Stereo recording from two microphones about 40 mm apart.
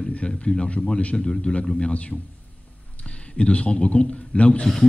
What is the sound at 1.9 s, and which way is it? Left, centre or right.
A man's voice, left.